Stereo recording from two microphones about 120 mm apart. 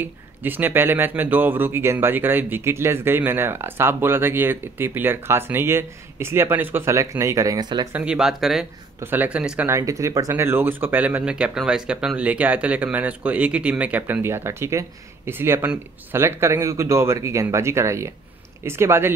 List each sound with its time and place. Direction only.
0.0 s speech: 15° right (ahead or behind); by 7.9 s 35° right (ahead or behind)
7.9 s speech: 10° right (ahead or behind)
9.0 s speech: 15° right (ahead or behind)
9.7 s speech: 25° right (ahead or behind)